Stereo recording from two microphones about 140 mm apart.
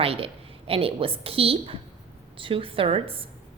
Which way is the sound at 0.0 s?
45° right (ahead or behind).